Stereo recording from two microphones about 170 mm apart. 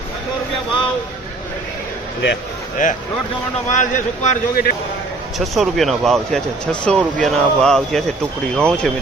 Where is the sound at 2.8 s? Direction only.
50° left (ahead or behind).